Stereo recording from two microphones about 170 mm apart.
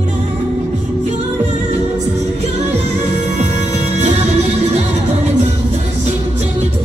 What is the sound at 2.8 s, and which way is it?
Music, 40° right (ahead or behind).